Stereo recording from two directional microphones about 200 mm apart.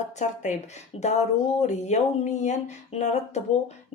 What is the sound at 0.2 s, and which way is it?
Speech, 35° left (ahead or behind).